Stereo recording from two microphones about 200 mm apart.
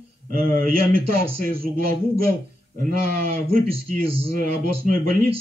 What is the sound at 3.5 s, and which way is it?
Speech, 45° right (ahead or behind).